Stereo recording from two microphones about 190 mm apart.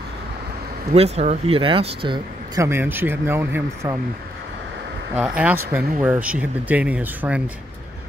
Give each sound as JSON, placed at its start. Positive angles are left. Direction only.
{"t": 0.9, "sound": "speech", "side_deg": -35}
{"t": 5.2, "sound": "speech", "side_deg": -5}